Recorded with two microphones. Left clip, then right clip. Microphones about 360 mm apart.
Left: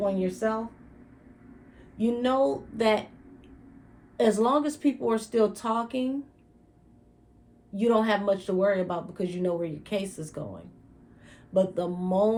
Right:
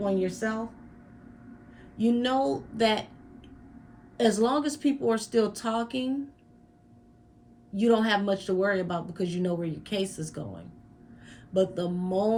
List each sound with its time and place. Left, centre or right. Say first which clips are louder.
0.0 s speech: left 1 dB; centre
2.0 s speech: left 1 dB; centre
4.2 s speech: left 1 dB; centre
7.8 s speech: even; centre
11.3 s a sound: left 1 dB; centre